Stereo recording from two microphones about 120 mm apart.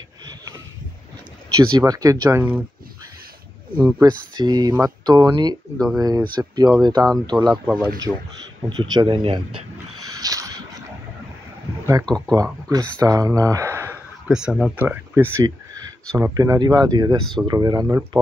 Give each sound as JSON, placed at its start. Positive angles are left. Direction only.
{"t": 1.5, "sound": "speech", "side_deg": -30}
{"t": 2.3, "sound": "speech", "side_deg": -10}
{"t": 4.4, "sound": "speech", "side_deg": -35}
{"t": 8.1, "sound": "speech", "side_deg": -5}
{"t": 8.6, "sound": "speech", "side_deg": -40}
{"t": 10.1, "sound": "a sound", "side_deg": -30}
{"t": 11.8, "sound": "speech", "side_deg": -25}
{"t": 14.2, "sound": "speech", "side_deg": -5}